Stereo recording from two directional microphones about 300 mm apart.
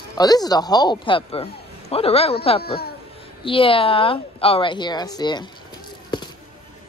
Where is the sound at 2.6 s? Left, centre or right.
Left.